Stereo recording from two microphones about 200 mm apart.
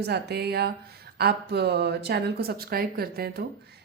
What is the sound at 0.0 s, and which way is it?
Speech, 55° right (ahead or behind).